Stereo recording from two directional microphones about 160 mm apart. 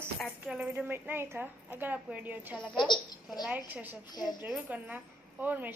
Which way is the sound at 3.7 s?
10° right (ahead or behind).